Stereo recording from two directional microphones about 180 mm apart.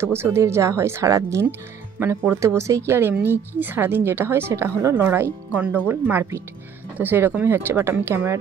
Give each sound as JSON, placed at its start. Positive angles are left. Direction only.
{"t": 0.0, "sound": "a woman's voice", "side_deg": -15}